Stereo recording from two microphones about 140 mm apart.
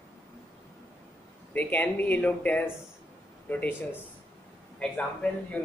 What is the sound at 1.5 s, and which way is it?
Speech, 10° left (ahead or behind).